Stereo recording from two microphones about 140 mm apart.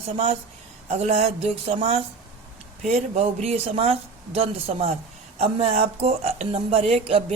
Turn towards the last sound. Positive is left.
turn(degrees=-45)  # may be behind; listen again after turning